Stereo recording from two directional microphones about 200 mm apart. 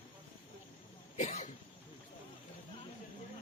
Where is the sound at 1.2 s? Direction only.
35° left (ahead or behind).